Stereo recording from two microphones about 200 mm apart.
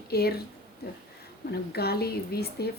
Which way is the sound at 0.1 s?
50° left (ahead or behind).